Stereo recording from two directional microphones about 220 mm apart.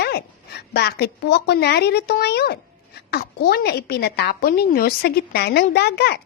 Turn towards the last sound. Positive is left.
turn(degrees=50)  # may be behind; listen again after turning